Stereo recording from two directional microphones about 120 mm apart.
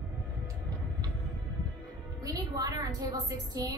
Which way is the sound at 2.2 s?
30° right (ahead or behind).